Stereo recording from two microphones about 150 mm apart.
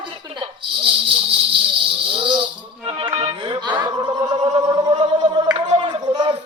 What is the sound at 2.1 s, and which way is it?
Speech, 35° right (ahead or behind).